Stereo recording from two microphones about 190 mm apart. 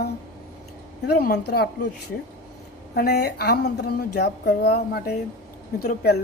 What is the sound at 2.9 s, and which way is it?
Speech, 60° left (ahead or behind).